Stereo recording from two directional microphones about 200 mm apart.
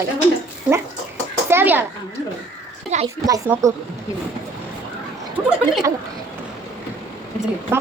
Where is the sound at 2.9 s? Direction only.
35° right (ahead or behind).